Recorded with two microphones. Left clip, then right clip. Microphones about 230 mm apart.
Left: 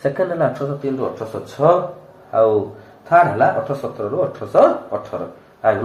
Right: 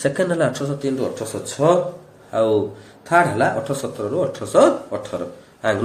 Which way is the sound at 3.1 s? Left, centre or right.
Right.